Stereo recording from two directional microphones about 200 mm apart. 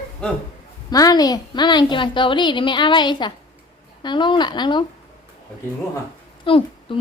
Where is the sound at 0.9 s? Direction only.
20° left (ahead or behind).